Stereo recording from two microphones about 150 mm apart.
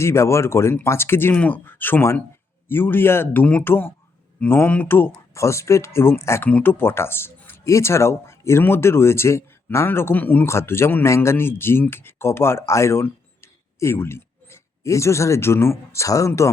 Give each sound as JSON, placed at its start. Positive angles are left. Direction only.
{"t": 0.0, "sound": "speech", "side_deg": 20}